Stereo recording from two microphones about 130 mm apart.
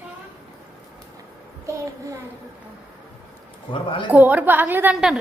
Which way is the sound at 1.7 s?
25° right (ahead or behind).